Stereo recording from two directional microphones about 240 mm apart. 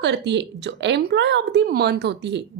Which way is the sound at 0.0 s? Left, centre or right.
Right.